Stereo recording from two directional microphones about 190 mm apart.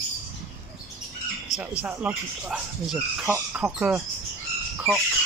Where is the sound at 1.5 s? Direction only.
20° left (ahead or behind).